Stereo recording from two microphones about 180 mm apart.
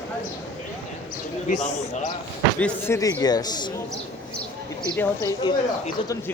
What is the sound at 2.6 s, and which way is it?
Speech, 15° left (ahead or behind).